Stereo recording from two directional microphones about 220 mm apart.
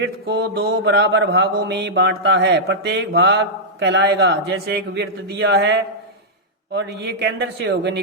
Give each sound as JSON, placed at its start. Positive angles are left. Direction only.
{"t": 0.0, "sound": "mantra", "side_deg": -50}